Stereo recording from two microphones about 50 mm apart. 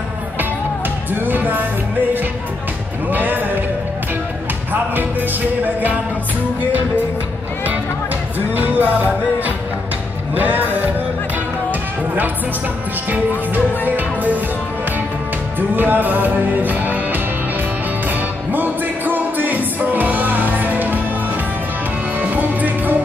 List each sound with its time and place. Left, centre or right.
1.2 s music: right
3.1 s music: right
8.5 s music: right
13.1 s music: right
15.7 s music: right
22.2 s music: right